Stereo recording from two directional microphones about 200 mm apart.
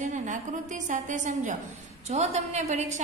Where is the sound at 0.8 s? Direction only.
40° right (ahead or behind).